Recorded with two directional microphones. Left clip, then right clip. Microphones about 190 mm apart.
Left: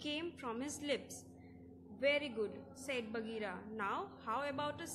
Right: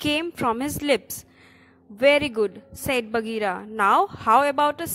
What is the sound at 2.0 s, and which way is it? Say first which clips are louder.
A woman's voice: right 17 dB; 50° right (ahead or behind).